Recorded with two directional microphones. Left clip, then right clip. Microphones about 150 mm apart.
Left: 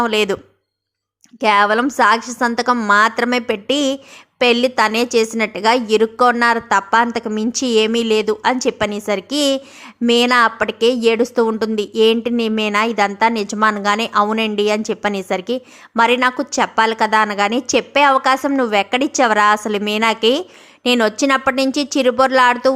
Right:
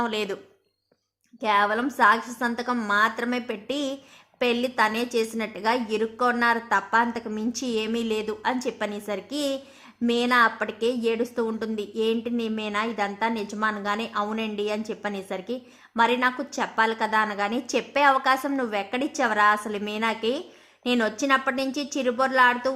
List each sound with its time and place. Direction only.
0.0 s a woman's voice: 35° left (ahead or behind)
1.4 s a woman's voice: 35° left (ahead or behind)